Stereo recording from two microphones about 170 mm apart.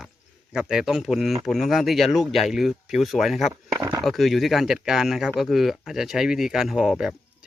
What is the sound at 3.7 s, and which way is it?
Speech, 20° right (ahead or behind).